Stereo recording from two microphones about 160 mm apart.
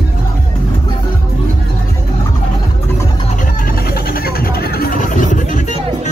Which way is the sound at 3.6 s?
70° left (ahead or behind).